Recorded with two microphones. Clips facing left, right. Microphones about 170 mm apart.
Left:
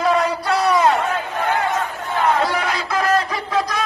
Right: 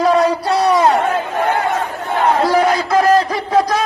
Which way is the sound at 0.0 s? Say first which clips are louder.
Right 5 dB; 35° right (ahead or behind).